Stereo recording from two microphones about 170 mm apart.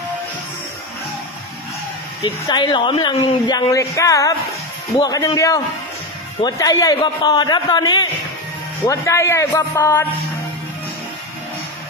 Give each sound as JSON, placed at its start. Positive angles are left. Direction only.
{"t": 2.2, "sound": "a man's voice", "side_deg": 25}